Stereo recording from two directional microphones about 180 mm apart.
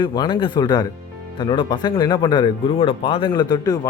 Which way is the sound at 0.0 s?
25° left (ahead or behind).